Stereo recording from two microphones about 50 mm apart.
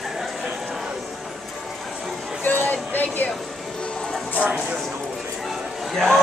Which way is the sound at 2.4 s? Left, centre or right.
Left.